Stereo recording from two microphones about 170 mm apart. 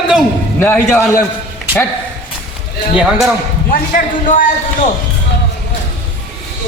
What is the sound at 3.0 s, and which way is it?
Speech, 5° right (ahead or behind).